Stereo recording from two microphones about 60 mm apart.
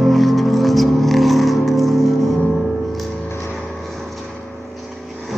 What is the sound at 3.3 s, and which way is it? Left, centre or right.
Music, left.